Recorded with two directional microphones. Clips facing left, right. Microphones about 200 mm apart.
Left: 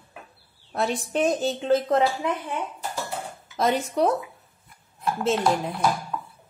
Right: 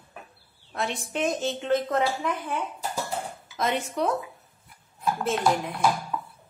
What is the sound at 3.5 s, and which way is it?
Speech, 35° left (ahead or behind).